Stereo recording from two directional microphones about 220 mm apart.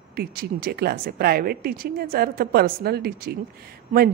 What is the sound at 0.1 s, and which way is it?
A man's voice, 45° right (ahead or behind).